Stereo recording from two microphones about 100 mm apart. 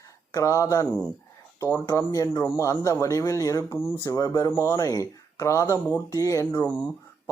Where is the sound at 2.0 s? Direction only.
35° left (ahead or behind).